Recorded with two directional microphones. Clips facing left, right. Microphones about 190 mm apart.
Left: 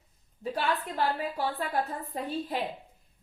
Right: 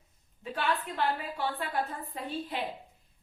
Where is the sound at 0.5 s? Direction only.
40° left (ahead or behind).